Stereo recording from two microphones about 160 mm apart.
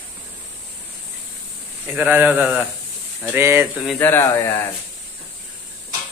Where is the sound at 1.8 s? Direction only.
10° right (ahead or behind).